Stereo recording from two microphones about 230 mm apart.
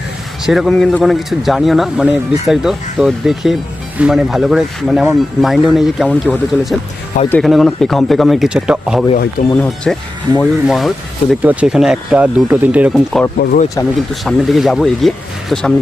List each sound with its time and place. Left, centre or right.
0.4 s speech: centre
13.4 s speech: left
14.1 s speech: centre